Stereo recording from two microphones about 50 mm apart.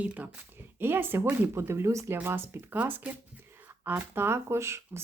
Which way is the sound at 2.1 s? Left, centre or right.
Right.